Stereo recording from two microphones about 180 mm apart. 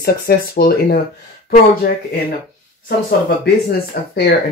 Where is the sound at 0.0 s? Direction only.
55° left (ahead or behind).